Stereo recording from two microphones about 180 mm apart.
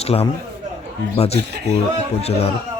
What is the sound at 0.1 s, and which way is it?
Speech, 30° left (ahead or behind).